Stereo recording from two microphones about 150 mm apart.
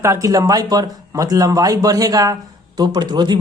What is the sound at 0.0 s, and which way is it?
Speech, 20° right (ahead or behind).